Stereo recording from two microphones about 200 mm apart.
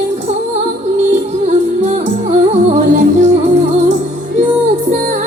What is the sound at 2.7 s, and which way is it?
Music, 35° right (ahead or behind).